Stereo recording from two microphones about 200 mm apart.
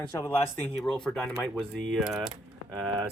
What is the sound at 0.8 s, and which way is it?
Speech, 5° left (ahead or behind).